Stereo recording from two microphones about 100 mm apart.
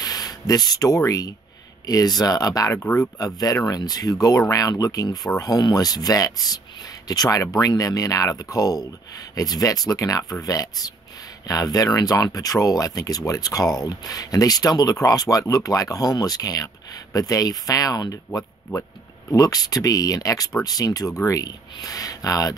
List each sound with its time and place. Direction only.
0.0 s speech: 40° left (ahead or behind)